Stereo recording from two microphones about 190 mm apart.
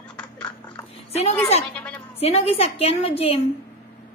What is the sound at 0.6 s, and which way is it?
Dog, 35° left (ahead or behind).